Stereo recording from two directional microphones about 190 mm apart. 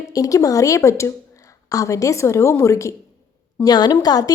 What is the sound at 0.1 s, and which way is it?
A woman's voice, 15° left (ahead or behind).